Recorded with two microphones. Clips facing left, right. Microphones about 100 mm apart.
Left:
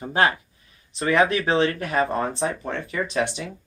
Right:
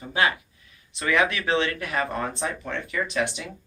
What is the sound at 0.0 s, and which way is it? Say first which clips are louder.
Speech: left 3 dB; 40° left (ahead or behind).